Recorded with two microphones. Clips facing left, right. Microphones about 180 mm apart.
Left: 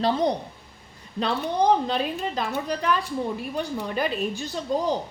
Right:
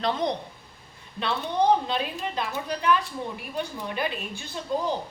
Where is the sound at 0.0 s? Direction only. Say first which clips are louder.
Left 4 dB; 35° left (ahead or behind).